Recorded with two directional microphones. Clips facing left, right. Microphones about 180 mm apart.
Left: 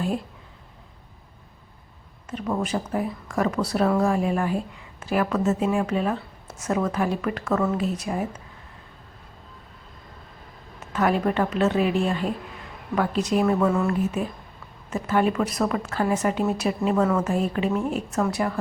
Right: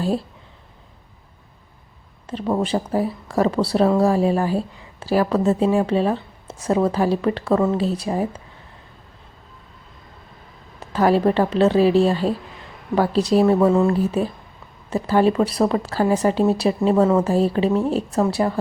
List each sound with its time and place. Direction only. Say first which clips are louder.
0.0 s speech: right 4 dB; 30° right (ahead or behind)
2.2 s speech: right 5 dB; 30° right (ahead or behind)
10.8 s speech: right 5 dB; 35° right (ahead or behind)